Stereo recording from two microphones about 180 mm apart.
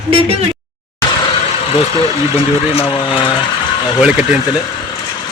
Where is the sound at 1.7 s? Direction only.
30° left (ahead or behind).